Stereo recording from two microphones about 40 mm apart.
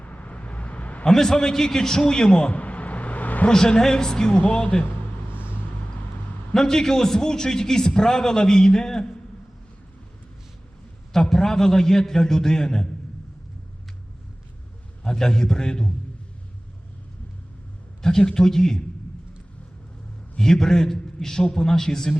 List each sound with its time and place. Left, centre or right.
0.0 s vehicle: left
1.0 s a man's voice: centre
2.5 s vehicle: left
3.5 s a man's voice: centre
4.4 s speech: left
6.5 s a man's voice: centre
11.1 s a man's voice: centre
15.0 s a man's voice: centre
18.0 s a man's voice: centre
20.4 s a man's voice: centre